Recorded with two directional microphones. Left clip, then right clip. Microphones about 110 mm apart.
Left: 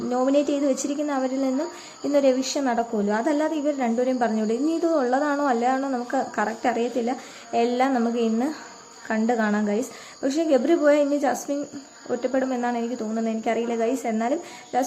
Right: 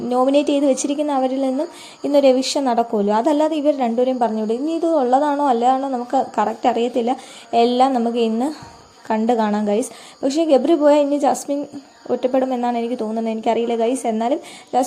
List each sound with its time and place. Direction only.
0.1 s a woman's voice: 45° right (ahead or behind)
4.2 s a woman's voice: 25° right (ahead or behind)
6.6 s a woman's voice: 45° right (ahead or behind)